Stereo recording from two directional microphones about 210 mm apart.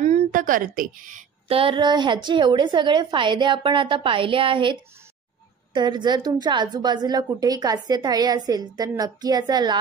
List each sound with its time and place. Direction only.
0.0 s a woman's voice: 35° right (ahead or behind)
1.5 s a woman's voice: 25° right (ahead or behind)
5.8 s a woman's voice: 20° right (ahead or behind)